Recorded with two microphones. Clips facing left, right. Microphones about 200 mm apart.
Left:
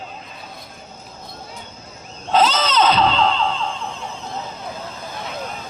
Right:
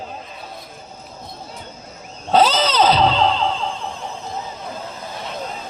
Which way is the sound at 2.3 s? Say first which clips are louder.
Right 2 dB; 35° right (ahead or behind).